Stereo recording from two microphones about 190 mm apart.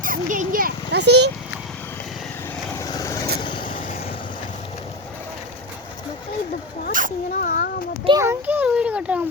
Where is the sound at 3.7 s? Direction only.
45° left (ahead or behind).